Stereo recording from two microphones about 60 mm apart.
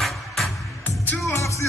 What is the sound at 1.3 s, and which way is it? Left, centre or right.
Music, left.